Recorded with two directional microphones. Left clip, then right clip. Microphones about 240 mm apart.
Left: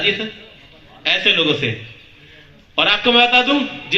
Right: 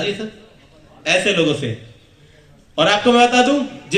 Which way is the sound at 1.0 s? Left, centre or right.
Right.